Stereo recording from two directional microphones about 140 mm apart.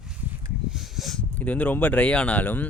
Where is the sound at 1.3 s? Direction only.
10° left (ahead or behind).